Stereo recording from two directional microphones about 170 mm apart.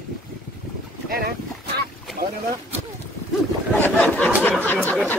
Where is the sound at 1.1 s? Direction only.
65° right (ahead or behind).